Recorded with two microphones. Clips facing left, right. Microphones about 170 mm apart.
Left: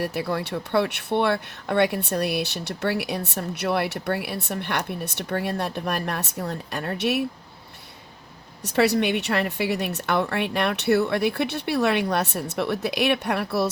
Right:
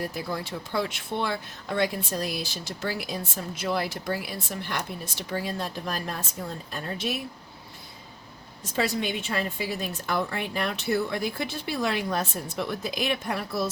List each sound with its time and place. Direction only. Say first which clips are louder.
0.0 s speech: left 5 dB; 70° left (ahead or behind)
8.6 s speech: left 7 dB; 70° left (ahead or behind)